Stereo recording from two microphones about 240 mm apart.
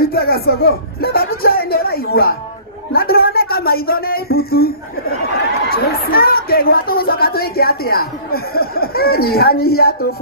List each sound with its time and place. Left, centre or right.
0.1 s speech: left